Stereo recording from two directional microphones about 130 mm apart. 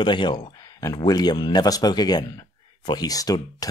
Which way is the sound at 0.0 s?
35° left (ahead or behind).